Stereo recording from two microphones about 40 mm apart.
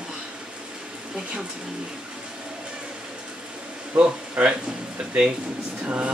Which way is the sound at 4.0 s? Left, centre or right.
Right.